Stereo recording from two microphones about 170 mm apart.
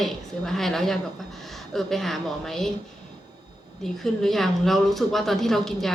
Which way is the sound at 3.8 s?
Centre (ahead or behind).